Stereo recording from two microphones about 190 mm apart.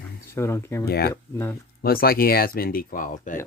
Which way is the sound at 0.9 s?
55° left (ahead or behind).